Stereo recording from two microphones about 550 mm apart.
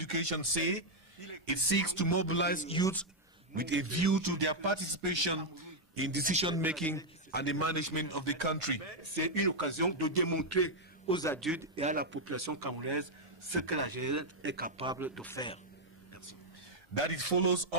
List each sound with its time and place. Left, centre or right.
0.0 s speech: left
1.2 s speech: left; by 3.1 s centre
3.5 s a man's voice: centre; by 5.6 s right
5.9 s a man's voice: centre
7.3 s a man's voice: left
11.1 s a man's voice: centre
16.9 s a man's voice: left